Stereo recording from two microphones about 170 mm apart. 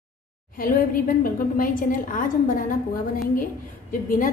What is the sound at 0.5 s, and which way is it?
A woman's voice, 55° left (ahead or behind).